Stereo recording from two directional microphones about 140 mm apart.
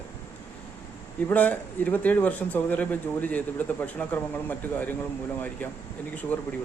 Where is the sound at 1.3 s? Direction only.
10° left (ahead or behind).